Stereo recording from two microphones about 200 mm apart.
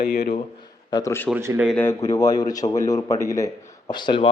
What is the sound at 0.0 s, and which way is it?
Speech, 50° left (ahead or behind).